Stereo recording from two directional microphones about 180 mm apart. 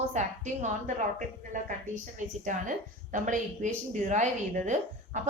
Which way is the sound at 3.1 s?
45° right (ahead or behind).